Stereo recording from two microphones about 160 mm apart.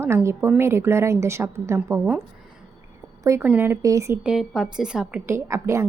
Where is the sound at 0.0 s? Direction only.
15° right (ahead or behind).